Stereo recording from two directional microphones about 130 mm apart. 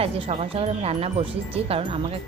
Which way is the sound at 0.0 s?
45° right (ahead or behind).